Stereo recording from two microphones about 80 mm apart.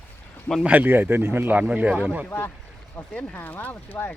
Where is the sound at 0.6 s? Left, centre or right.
Right.